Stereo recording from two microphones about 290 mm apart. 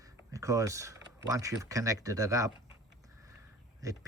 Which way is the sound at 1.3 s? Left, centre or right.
Centre.